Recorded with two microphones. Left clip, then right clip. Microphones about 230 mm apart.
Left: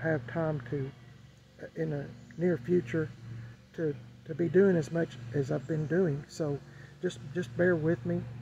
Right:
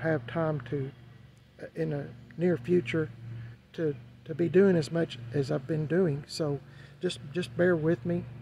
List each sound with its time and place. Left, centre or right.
0.0 s speech: centre
4.7 s speech: centre